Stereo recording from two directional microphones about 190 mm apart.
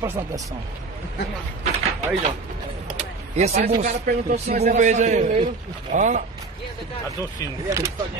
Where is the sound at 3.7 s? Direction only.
50° right (ahead or behind).